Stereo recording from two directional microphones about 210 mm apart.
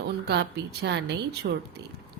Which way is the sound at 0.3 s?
50° right (ahead or behind).